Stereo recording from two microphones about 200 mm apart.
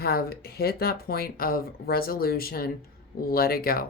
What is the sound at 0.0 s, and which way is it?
Speech, 50° left (ahead or behind).